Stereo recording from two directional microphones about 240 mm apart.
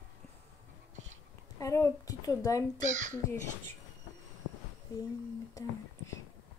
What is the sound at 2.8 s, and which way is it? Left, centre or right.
Speech, right.